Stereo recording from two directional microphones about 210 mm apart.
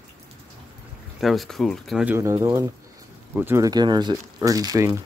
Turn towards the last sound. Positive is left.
turn(degrees=-15)  # may be behind; listen again after turning